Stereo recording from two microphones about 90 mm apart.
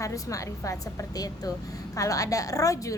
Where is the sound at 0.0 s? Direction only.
35° left (ahead or behind).